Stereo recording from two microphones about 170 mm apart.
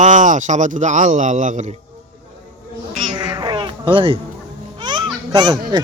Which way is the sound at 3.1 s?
25° right (ahead or behind).